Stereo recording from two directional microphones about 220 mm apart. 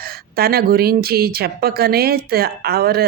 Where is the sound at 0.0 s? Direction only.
45° right (ahead or behind).